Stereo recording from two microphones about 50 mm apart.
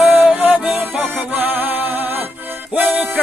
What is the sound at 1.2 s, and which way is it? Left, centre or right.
Music, right.